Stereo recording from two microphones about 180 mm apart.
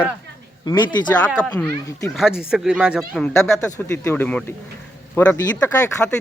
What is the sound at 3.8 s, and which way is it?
Speech, 15° left (ahead or behind).